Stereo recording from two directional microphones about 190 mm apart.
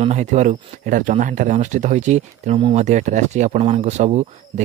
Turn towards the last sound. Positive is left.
turn(degrees=-35)  # may be behind; listen again after turning